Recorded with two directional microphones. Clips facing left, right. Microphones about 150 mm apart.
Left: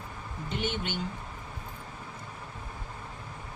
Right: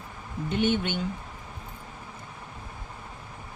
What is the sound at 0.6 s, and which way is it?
Speech, 55° right (ahead or behind).